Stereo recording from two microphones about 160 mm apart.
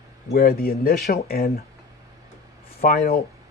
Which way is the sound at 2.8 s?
65° left (ahead or behind).